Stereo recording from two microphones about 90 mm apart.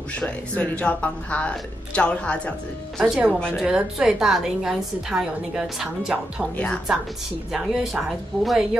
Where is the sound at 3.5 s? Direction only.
10° right (ahead or behind).